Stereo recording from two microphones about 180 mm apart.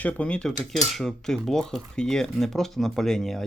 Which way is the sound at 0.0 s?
5° left (ahead or behind).